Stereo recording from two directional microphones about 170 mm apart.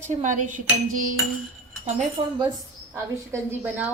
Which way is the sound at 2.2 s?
35° right (ahead or behind).